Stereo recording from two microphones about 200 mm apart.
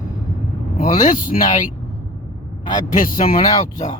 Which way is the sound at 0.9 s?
40° left (ahead or behind).